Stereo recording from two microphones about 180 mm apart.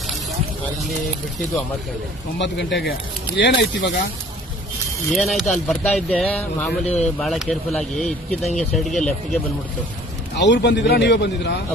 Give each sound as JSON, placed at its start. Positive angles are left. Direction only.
{"t": 2.4, "sound": "speech", "side_deg": 75}
{"t": 5.1, "sound": "speech", "side_deg": 0}
{"t": 6.8, "sound": "speech", "side_deg": 40}
{"t": 7.2, "sound": "speech", "side_deg": 0}
{"t": 10.3, "sound": "speech", "side_deg": 80}